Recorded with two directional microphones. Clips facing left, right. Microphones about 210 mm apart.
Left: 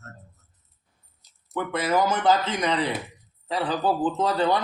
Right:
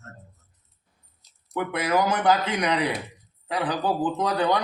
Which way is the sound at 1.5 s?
15° right (ahead or behind).